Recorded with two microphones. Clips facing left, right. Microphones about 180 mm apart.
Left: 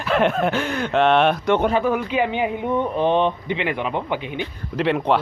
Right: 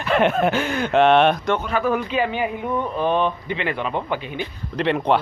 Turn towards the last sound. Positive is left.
turn(degrees=0)  # may be behind; listen again after turning